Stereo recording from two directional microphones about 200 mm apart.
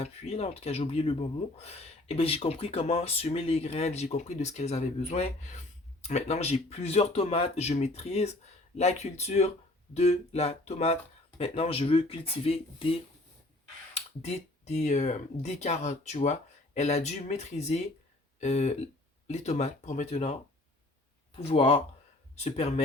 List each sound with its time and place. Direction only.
0.0 s speech: 30° left (ahead or behind)
18.3 s a sound: 35° left (ahead or behind)
19.3 s speech: 35° left (ahead or behind)
21.3 s speech: 30° left (ahead or behind)